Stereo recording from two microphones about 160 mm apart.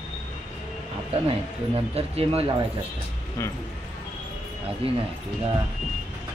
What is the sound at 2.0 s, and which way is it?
Speech, 40° right (ahead or behind).